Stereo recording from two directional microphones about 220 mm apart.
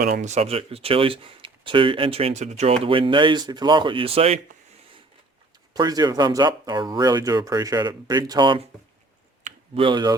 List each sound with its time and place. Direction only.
0.0 s speech: 40° right (ahead or behind)
5.7 s speech: 20° right (ahead or behind)
9.4 s a sound: 25° right (ahead or behind)